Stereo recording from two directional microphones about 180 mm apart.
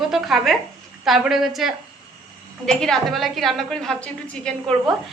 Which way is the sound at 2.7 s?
5° left (ahead or behind).